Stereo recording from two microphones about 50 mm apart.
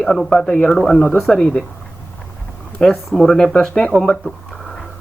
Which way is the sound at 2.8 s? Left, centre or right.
Centre.